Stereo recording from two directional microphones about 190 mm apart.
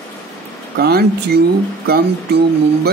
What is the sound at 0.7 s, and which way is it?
Speech, 55° right (ahead or behind).